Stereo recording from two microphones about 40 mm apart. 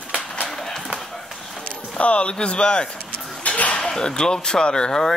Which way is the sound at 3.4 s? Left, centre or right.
Left.